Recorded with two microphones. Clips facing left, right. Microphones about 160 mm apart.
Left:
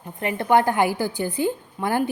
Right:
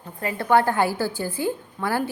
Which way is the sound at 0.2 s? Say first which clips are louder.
Left 1 dB; 20° left (ahead or behind).